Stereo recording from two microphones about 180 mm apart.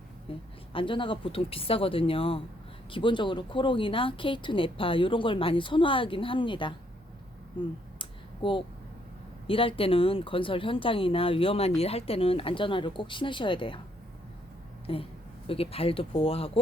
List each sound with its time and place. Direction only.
0.3 s speech: 30° left (ahead or behind)
7.9 s a sound: 30° left (ahead or behind)
9.5 s speech: 30° left (ahead or behind)
14.9 s speech: 30° left (ahead or behind)